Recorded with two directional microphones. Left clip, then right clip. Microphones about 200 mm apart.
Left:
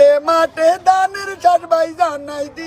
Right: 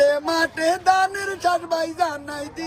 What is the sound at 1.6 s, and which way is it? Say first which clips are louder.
Speech: left 8 dB; 15° left (ahead or behind).